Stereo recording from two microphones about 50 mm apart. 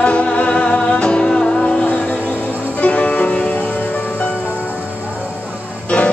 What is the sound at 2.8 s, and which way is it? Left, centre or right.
Music, left.